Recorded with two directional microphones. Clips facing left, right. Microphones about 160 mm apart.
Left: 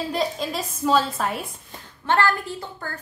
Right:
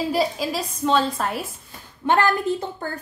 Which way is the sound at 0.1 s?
5° right (ahead or behind).